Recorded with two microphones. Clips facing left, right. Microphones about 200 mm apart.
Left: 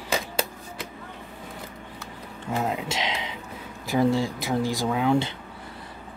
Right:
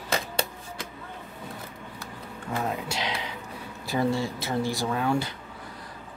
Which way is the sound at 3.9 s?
15° left (ahead or behind).